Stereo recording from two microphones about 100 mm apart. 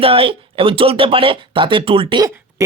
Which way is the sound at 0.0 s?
70° right (ahead or behind).